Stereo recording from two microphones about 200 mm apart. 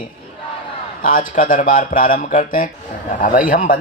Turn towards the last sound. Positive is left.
turn(degrees=45)  # may be behind; listen again after turning